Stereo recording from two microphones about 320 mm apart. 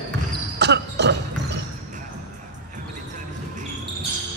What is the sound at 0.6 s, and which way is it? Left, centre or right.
Basketball bounce, right.